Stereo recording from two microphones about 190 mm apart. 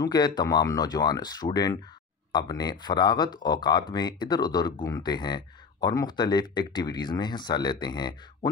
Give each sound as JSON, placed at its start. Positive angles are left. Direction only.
{"t": 0.0, "sound": "speech", "side_deg": 20}